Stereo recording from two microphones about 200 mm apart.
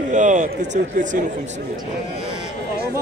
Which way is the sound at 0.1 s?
40° right (ahead or behind).